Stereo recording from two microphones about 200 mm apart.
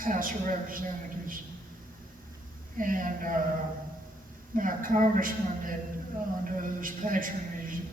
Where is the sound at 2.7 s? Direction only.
45° right (ahead or behind).